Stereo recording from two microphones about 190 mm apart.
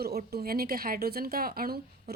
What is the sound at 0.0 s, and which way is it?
A woman's voice, 55° right (ahead or behind).